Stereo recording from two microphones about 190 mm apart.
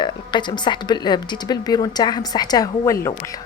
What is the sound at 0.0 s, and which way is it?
A woman's voice, 25° left (ahead or behind).